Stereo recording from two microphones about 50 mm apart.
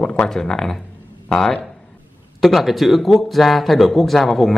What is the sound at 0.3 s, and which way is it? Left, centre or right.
Speech, centre.